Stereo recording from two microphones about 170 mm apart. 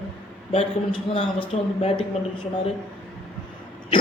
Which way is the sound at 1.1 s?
30° left (ahead or behind).